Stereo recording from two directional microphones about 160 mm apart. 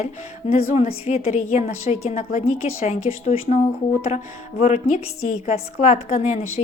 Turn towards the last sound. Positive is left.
turn(degrees=45)  # may be behind; listen again after turning